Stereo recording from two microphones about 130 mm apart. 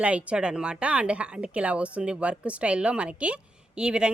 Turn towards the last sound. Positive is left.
turn(degrees=-5)  # may be behind; listen again after turning